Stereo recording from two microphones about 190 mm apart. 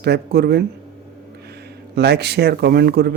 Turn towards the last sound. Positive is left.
turn(degrees=-55)  # may be behind; listen again after turning